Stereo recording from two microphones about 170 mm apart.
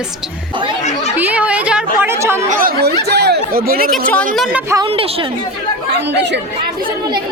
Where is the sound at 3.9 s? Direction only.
10° left (ahead or behind).